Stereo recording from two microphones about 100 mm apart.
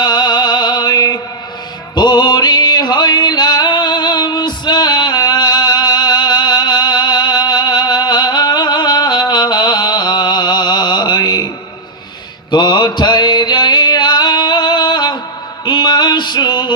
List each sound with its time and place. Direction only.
0.0 s music: 45° left (ahead or behind)